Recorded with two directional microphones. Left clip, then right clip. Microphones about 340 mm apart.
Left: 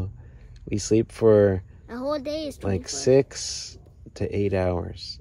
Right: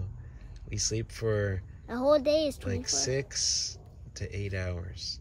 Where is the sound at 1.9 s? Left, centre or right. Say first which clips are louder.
Right 4 dB; centre.